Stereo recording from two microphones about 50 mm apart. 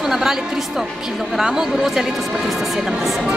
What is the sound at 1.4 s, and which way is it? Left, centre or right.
Speech, centre.